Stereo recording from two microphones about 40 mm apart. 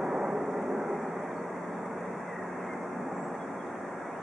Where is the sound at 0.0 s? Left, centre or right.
Centre.